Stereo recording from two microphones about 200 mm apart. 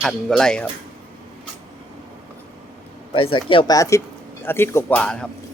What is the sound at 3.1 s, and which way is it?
Speech, 25° left (ahead or behind).